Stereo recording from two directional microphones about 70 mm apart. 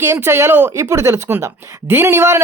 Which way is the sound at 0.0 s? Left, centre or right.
Right.